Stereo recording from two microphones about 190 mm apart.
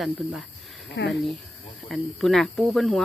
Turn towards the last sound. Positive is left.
turn(degrees=0)  # may be behind; listen again after turning